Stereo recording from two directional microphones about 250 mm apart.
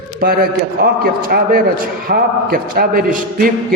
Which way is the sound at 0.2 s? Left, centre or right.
Right.